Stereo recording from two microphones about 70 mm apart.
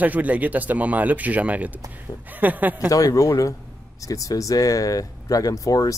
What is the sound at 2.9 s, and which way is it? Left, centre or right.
Speech, left.